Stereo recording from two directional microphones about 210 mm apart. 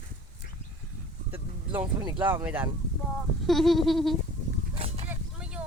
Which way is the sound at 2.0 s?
20° right (ahead or behind).